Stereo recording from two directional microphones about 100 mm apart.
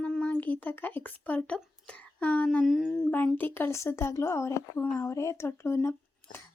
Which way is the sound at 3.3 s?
20° left (ahead or behind).